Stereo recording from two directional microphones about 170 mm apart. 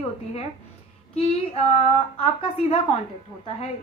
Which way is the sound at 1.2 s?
35° left (ahead or behind).